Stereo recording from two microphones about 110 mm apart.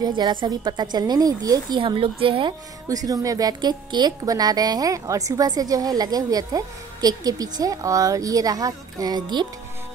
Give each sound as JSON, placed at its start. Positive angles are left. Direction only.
{"t": 0.0, "sound": "speech", "side_deg": -45}
{"t": 1.8, "sound": "speech", "side_deg": -50}
{"t": 2.9, "sound": "speech", "side_deg": -35}